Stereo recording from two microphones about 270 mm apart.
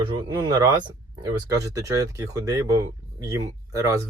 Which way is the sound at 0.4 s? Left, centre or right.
Centre.